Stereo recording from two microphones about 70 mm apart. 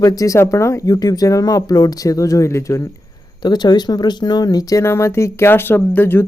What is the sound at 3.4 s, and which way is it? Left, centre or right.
Speech, left.